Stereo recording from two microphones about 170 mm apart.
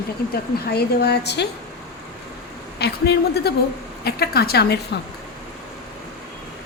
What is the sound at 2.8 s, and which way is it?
Speech, 70° left (ahead or behind).